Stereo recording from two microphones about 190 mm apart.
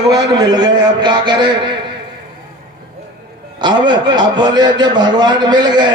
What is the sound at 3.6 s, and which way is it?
A man's voice, 25° right (ahead or behind).